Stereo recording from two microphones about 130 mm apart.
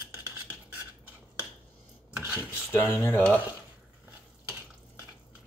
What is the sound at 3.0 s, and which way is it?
Speech, 15° left (ahead or behind).